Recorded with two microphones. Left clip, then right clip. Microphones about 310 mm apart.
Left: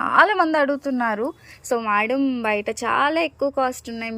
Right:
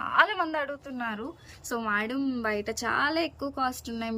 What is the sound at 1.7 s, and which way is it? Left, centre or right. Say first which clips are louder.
A woman's voice: left 9 dB; centre.